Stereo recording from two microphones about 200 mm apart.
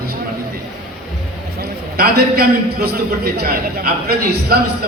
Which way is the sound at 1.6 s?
50° right (ahead or behind).